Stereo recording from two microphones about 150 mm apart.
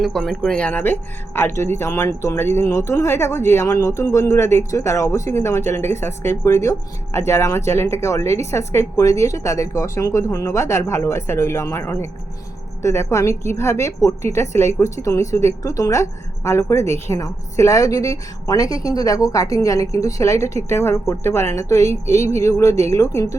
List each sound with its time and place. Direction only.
0.0 s speech: centre (ahead or behind); by 23.3 s 20° left (ahead or behind)